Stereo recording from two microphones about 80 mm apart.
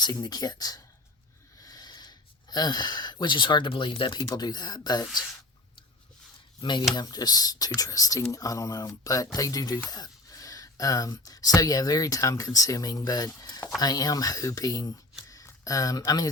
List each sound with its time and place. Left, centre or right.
0.0 s speech: left
1.6 s a sound: left
4.4 s speech: left
6.6 s speech: left
6.9 s speech: left